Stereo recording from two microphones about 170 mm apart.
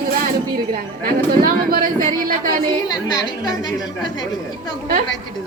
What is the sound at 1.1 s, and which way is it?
A woman's voice, 60° right (ahead or behind).